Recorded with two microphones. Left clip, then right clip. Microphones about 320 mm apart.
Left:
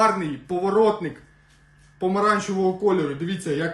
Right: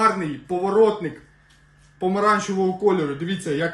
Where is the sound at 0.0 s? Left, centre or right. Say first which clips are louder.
Even; centre.